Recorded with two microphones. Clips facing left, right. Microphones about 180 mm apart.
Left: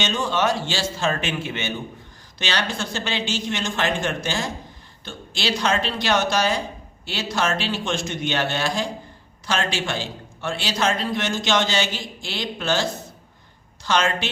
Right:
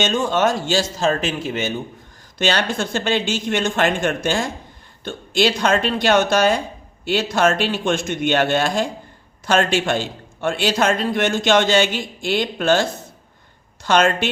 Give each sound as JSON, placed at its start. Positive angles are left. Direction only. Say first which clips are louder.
{"t": 0.0, "sound": "a man's voice", "louder": "right 4 dB", "side_deg": -50}
{"t": 2.4, "sound": "a man's voice", "louder": "right 6 dB", "side_deg": -50}